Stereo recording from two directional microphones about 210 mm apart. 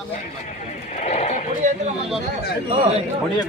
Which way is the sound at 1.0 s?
35° left (ahead or behind).